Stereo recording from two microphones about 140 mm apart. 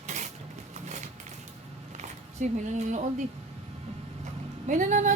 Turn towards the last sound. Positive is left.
turn(degrees=-60)  # may be behind; listen again after turning